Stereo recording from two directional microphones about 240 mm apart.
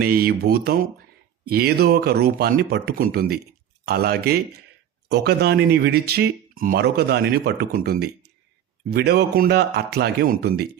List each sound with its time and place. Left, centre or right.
0.0 s speech: right